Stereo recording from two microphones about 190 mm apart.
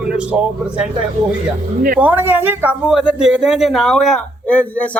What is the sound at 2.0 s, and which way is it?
Speech, 10° right (ahead or behind).